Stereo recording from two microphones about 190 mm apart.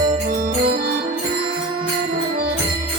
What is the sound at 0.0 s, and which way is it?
Music, 45° right (ahead or behind).